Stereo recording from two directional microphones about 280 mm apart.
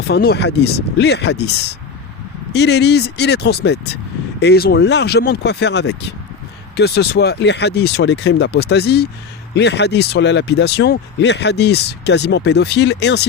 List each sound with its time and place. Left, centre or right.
0.1 s speech: left